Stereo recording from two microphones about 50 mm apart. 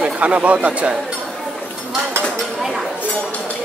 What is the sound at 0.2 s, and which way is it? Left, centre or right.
Speech, right.